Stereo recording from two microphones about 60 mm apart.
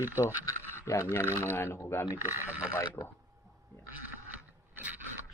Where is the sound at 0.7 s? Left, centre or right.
Left.